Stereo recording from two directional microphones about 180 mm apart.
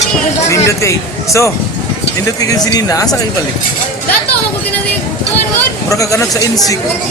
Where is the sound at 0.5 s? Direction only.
15° left (ahead or behind).